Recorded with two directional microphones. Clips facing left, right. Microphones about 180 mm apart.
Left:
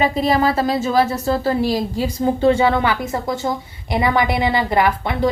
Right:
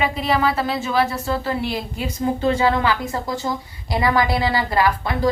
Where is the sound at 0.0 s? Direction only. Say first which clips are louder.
Left 3 dB; 35° left (ahead or behind).